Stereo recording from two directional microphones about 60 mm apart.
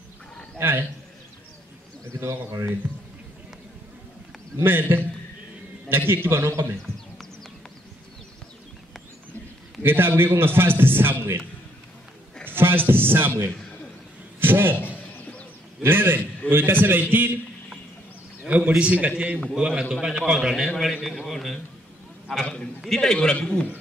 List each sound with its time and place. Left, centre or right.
0.6 s a man's voice: right
2.1 s a man's voice: right
4.6 s a man's voice: right
9.8 s a man's voice: right
12.4 s speech: right
14.4 s a man's voice: right
15.8 s a man's voice: right
18.7 s a man's voice: centre
22.8 s a man's voice: centre
23.1 s a man's voice: centre